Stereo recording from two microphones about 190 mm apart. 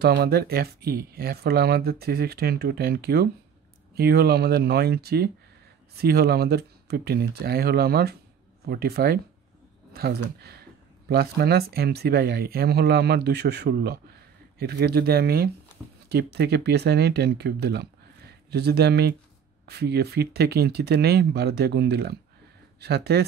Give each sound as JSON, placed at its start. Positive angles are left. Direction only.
{"t": 0.0, "sound": "speech", "side_deg": -55}